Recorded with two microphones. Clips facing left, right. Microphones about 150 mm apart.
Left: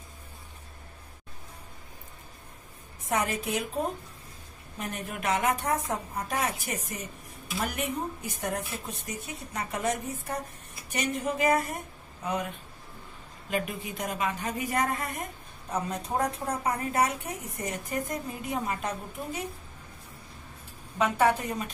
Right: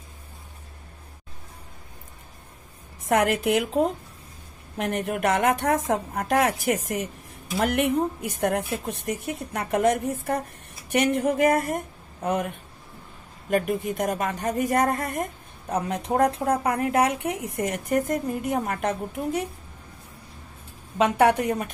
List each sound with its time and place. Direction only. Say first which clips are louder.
3.1 s a woman's voice: right 8 dB; 85° right
4.7 s a woman's voice: right 9 dB; 75° right (ahead or behind); by 7.1 s 90° right
7.5 s speech: right 9 dB; 70° right (ahead or behind)
13.5 s a woman's voice: right 8 dB; 55° right (ahead or behind)
15.9 s speech: right 9 dB; 75° right (ahead or behind)
21.0 s speech: right 5 dB; 70° right (ahead or behind)